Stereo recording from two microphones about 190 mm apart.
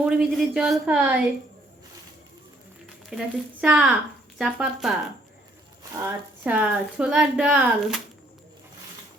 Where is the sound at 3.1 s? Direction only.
5° right (ahead or behind).